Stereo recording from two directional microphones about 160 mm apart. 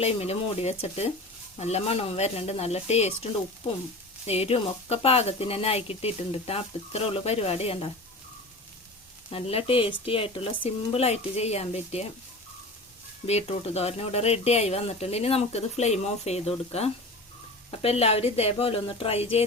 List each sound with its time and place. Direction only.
0.0 s speech: 40° left (ahead or behind)
4.3 s speech: 40° left (ahead or behind)
9.3 s speech: 35° left (ahead or behind)
13.2 s speech: 40° left (ahead or behind)